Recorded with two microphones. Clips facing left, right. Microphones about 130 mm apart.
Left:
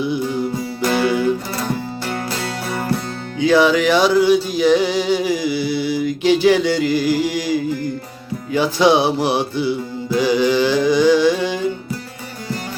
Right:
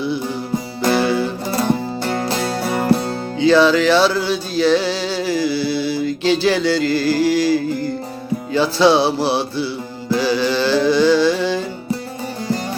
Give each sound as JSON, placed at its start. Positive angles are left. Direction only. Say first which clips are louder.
{"t": 0.9, "sound": "music", "louder": "even", "side_deg": -35}
{"t": 3.4, "sound": "music", "louder": "right 1 dB", "side_deg": 15}